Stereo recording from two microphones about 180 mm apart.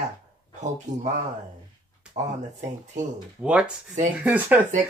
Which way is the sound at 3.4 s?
5° right (ahead or behind).